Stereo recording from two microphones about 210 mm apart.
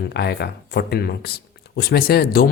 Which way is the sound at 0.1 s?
50° left (ahead or behind).